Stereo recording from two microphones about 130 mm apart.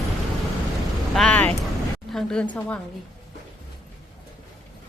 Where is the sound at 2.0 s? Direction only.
5° left (ahead or behind).